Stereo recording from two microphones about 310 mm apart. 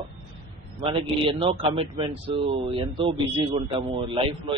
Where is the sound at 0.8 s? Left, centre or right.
Centre.